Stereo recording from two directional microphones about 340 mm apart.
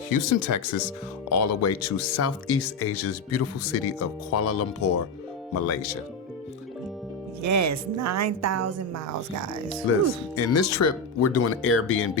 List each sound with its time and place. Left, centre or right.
0.1 s speech: left
7.4 s a woman's voice: right
9.9 s speech: left